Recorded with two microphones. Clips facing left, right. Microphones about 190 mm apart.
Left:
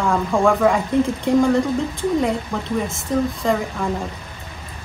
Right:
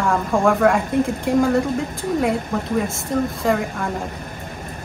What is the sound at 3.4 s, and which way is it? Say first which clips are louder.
Speech: even; centre (ahead or behind).